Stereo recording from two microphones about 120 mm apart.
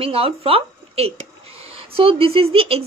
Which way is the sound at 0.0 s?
55° right (ahead or behind).